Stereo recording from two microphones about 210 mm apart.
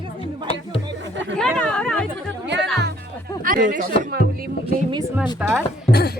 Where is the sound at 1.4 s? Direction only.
5° left (ahead or behind).